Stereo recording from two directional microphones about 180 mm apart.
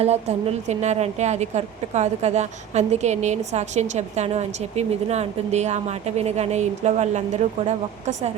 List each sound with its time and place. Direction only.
0.0 s a woman's voice: 35° right (ahead or behind)